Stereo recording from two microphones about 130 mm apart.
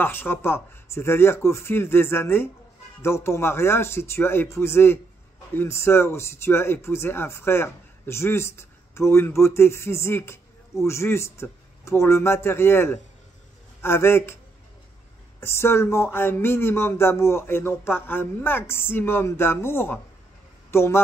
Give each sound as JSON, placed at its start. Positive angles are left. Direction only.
{"t": 0.0, "sound": "speech", "side_deg": 15}
{"t": 15.4, "sound": "speech", "side_deg": 20}